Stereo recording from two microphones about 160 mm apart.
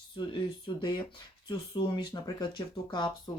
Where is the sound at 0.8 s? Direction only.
30° left (ahead or behind).